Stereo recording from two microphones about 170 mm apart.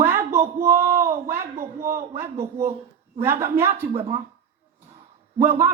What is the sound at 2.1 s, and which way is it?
A man's voice, 15° right (ahead or behind).